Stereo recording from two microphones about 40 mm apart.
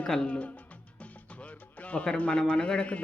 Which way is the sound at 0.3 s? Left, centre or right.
Left.